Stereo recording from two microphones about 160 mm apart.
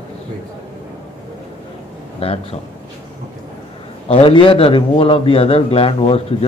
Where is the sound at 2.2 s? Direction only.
40° left (ahead or behind).